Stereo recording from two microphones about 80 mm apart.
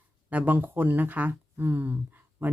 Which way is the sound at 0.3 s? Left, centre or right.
Right.